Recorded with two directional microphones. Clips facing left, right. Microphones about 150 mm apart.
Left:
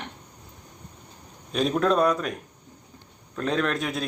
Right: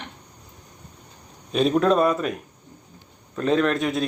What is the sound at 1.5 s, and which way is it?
A man's voice, centre (ahead or behind).